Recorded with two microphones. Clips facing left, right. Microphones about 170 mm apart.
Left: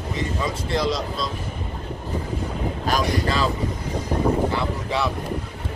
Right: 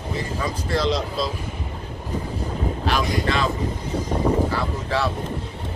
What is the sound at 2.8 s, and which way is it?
Boat, 40° left (ahead or behind).